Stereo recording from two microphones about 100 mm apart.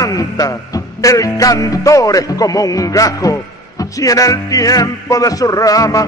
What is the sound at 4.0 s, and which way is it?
Music, 35° left (ahead or behind).